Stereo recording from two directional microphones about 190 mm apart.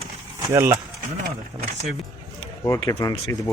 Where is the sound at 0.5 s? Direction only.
15° right (ahead or behind).